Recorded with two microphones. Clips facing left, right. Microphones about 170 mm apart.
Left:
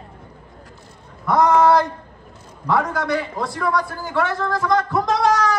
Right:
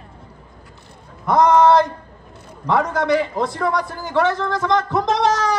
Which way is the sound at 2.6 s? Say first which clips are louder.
Right 2 dB; 20° right (ahead or behind).